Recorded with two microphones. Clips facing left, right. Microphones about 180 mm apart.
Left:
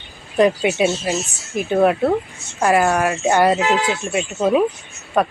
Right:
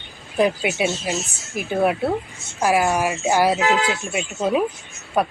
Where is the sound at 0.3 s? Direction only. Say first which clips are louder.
Left 4 dB; 5° right (ahead or behind).